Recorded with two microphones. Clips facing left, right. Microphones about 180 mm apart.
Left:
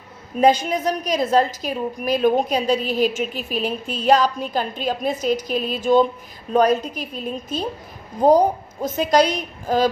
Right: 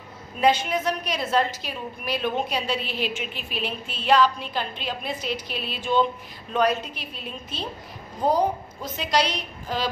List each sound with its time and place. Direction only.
0.4 s a woman's voice: 40° left (ahead or behind)